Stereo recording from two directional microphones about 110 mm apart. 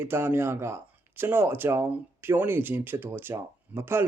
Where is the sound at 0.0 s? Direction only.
20° right (ahead or behind).